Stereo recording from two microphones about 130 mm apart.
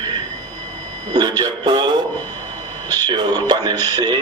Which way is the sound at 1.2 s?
35° right (ahead or behind).